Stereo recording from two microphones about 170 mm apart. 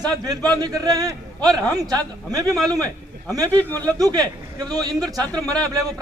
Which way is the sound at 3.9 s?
20° right (ahead or behind).